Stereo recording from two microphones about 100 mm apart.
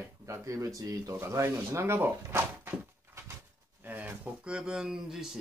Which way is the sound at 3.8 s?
20° right (ahead or behind).